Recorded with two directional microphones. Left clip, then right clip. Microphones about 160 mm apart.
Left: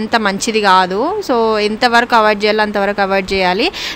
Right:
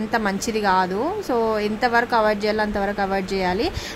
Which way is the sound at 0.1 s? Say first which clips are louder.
Left 9 dB; 30° left (ahead or behind).